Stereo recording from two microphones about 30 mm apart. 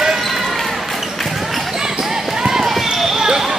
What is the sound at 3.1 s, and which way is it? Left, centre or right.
Basketball bounce, centre.